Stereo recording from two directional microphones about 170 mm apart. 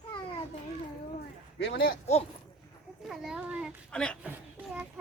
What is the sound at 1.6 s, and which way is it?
Speech, 65° left (ahead or behind).